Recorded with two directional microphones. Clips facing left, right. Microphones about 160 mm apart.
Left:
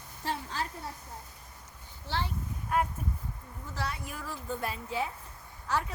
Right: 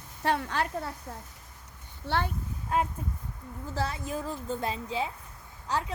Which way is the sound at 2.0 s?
55° right (ahead or behind).